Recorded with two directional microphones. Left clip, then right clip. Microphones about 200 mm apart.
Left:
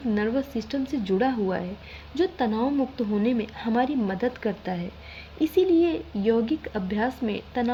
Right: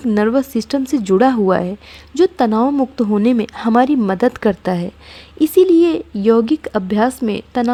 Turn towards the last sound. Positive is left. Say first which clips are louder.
# right 9 dB
turn(degrees=-40)  # may be behind; listen again after turning